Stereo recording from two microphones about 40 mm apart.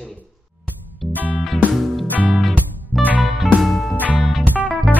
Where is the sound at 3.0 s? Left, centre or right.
Left.